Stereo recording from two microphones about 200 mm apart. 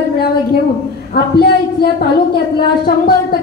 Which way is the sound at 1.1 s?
50° left (ahead or behind).